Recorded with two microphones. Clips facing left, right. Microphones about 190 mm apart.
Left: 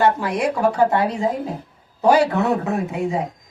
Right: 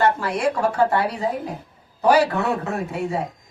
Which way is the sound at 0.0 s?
15° left (ahead or behind).